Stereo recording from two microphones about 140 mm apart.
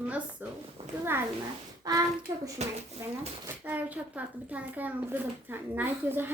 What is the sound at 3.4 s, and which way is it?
Speech, 10° right (ahead or behind).